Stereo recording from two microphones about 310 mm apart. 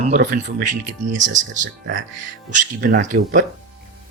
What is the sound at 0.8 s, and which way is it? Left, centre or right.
Speech, right.